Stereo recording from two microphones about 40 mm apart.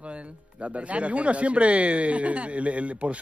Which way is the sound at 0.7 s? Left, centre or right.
Right.